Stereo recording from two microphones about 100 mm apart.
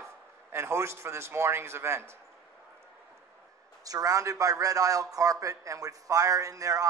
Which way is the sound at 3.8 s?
35° right (ahead or behind).